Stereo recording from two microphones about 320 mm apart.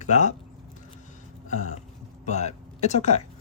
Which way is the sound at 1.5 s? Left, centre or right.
Left.